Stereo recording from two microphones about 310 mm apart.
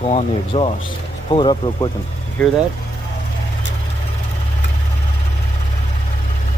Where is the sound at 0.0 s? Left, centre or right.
Centre.